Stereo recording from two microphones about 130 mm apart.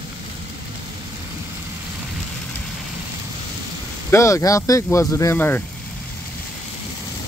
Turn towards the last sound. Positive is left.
turn(degrees=15)  # may be behind; listen again after turning